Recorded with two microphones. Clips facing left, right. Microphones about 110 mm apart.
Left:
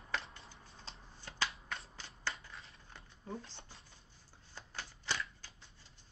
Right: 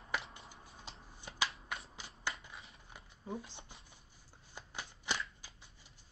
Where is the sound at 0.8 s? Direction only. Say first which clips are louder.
Even; 15° right (ahead or behind).